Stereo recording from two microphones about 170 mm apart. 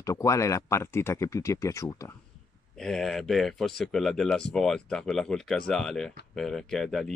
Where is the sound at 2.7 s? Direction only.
Centre (ahead or behind).